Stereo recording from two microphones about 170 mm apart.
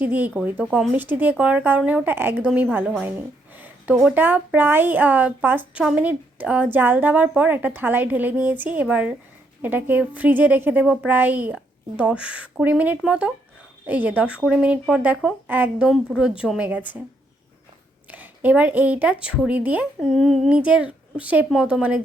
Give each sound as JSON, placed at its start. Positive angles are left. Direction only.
{"t": 0.0, "sound": "a woman's voice", "side_deg": -10}
{"t": 18.1, "sound": "a woman's voice", "side_deg": -10}